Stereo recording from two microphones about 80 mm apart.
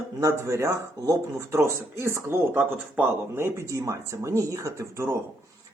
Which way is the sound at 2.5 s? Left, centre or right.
Right.